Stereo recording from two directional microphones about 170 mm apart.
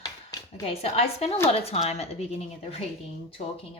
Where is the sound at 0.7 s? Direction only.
40° left (ahead or behind).